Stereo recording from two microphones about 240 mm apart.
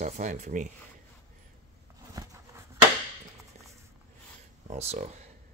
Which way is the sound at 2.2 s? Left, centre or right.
Centre.